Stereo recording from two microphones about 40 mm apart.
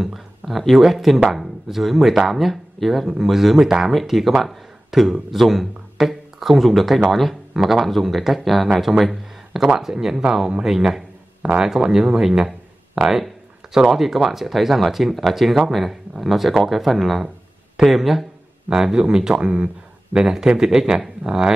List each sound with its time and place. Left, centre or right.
0.0 s a man's voice: centre
11.4 s speech: right; by 18.2 s centre
18.7 s speech: centre
20.2 s a man's voice: centre